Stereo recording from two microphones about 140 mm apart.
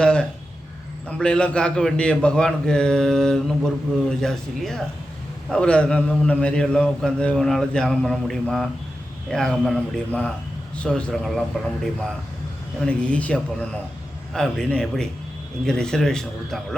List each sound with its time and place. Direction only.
0.0 s a sound: 5° left (ahead or behind)
1.0 s a man's voice: 5° left (ahead or behind)
12.8 s a man's voice: 10° left (ahead or behind)